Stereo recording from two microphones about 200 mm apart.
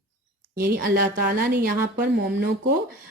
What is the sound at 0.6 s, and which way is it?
A woman's voice, 45° right (ahead or behind).